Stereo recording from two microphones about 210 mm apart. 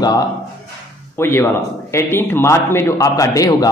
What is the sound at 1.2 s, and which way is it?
A man's voice, 10° left (ahead or behind).